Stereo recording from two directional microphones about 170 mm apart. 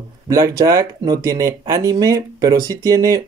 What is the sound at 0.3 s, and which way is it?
Speech, 20° right (ahead or behind).